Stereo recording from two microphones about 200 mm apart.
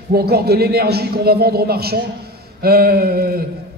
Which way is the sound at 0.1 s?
50° right (ahead or behind).